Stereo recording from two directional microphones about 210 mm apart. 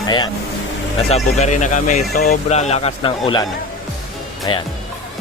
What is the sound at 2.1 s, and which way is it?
Speech, 50° left (ahead or behind).